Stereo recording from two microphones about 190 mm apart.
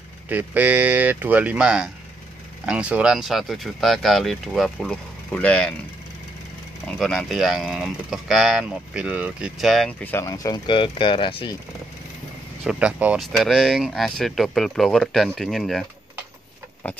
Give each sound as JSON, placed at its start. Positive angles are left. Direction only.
{"t": 0.3, "sound": "speech", "side_deg": -10}
{"t": 6.9, "sound": "speech", "side_deg": 0}
{"t": 12.6, "sound": "speech", "side_deg": -5}